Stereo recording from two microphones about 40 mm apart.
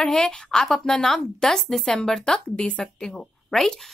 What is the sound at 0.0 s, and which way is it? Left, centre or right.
Speech, centre.